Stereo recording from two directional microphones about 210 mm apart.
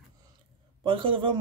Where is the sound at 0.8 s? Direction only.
25° right (ahead or behind).